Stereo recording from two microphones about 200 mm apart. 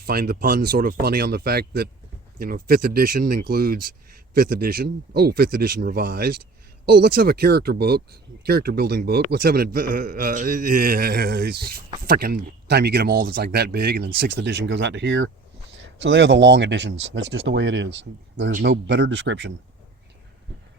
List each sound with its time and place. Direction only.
0.0 s a man's voice: 50° right (ahead or behind)